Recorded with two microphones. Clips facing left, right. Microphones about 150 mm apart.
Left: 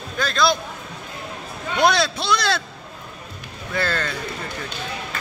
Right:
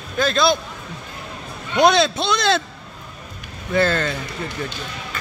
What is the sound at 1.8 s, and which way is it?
Speech, 20° right (ahead or behind).